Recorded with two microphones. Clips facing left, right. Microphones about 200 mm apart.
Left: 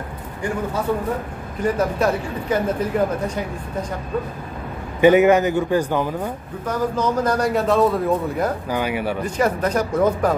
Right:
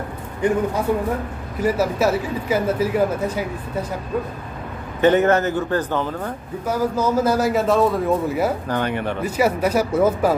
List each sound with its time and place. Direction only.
0.4 s speech: 20° right (ahead or behind)
1.6 s a man's voice: 5° right (ahead or behind)
5.0 s a man's voice: 10° left (ahead or behind)
6.6 s a man's voice: 10° right (ahead or behind)
8.6 s a man's voice: 10° left (ahead or behind)
9.2 s speech: 5° right (ahead or behind)